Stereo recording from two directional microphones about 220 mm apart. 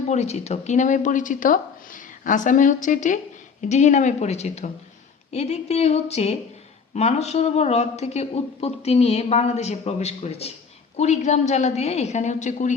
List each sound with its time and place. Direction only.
0.1 s a woman's voice: 30° left (ahead or behind)